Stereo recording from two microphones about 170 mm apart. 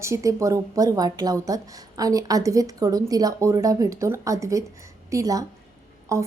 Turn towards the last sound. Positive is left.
turn(degrees=-15)  # may be behind; listen again after turning